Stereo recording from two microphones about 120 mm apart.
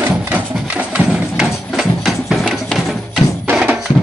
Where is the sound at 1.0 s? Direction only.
5° right (ahead or behind).